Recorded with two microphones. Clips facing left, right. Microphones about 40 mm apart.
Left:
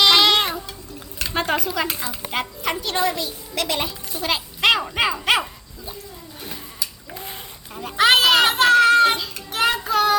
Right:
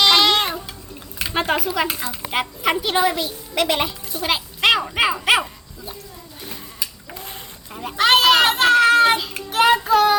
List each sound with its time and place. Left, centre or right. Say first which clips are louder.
0.0 s music: even; centre
1.2 s a woman's voice: right 2 dB; centre
4.3 s speech: right 1 dB; centre
7.7 s speech: right 2 dB; centre
7.9 s a sound: right 1 dB; centre
9.5 s child singing: right 5 dB; centre